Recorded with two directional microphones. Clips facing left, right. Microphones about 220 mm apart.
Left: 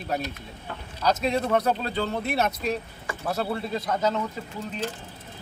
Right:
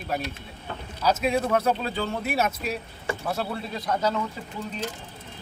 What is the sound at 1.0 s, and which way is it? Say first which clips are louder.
Speech: right 1 dB; 5° right (ahead or behind).